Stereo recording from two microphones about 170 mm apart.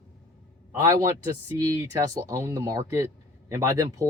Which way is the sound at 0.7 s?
20° right (ahead or behind).